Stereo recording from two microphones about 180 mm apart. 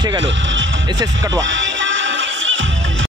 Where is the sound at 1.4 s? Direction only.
90° right.